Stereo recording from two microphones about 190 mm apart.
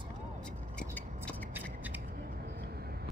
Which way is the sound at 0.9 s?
10° left (ahead or behind).